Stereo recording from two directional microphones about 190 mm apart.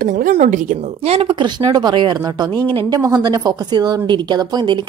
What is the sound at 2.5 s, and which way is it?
Speech, 10° left (ahead or behind).